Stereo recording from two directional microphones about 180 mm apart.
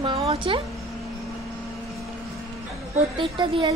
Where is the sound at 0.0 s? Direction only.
30° right (ahead or behind).